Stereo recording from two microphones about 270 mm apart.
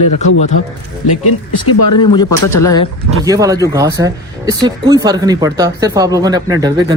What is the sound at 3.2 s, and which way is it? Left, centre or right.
Speech, centre.